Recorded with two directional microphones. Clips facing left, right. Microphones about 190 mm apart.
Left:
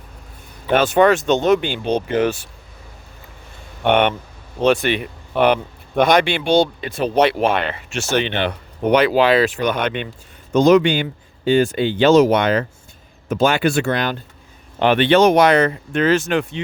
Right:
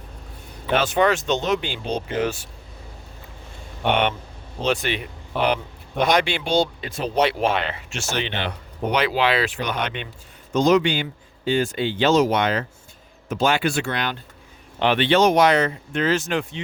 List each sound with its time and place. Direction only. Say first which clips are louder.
0.7 s speech: left 5 dB; 50° left (ahead or behind)
4.6 s speech: left 7 dB; 60° left (ahead or behind)